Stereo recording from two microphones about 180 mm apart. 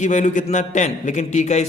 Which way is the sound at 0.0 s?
40° left (ahead or behind).